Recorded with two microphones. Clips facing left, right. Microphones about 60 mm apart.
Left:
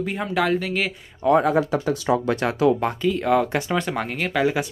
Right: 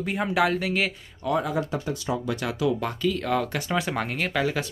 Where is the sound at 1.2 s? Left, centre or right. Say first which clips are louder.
Left 8 dB; left.